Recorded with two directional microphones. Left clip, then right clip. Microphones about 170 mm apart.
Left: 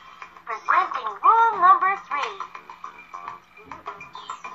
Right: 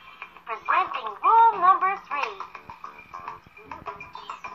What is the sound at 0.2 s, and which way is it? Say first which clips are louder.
Telephone: left 2 dB; 45° right (ahead or behind).